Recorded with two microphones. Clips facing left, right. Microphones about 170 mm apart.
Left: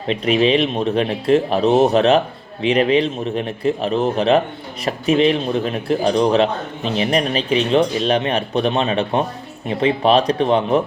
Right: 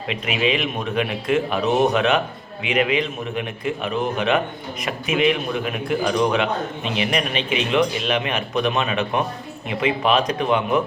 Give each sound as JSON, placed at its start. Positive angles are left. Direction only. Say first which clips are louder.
{"t": 0.1, "sound": "speech", "louder": "left 7 dB", "side_deg": 35}